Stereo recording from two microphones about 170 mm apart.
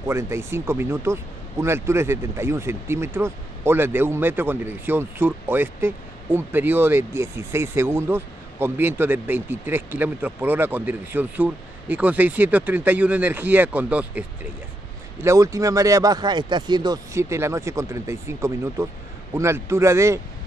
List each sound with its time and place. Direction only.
0.0 s speech: 15° right (ahead or behind)